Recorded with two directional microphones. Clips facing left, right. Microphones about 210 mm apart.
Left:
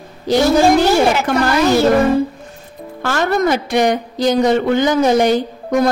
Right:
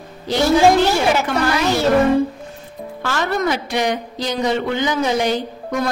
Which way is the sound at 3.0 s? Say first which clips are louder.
Left 5 dB; 50° left (ahead or behind).